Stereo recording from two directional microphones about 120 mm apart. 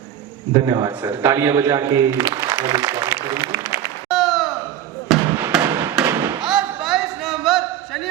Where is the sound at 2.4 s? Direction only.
35° right (ahead or behind).